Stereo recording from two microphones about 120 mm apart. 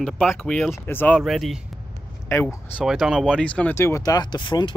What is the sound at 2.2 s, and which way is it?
Speech, 20° left (ahead or behind).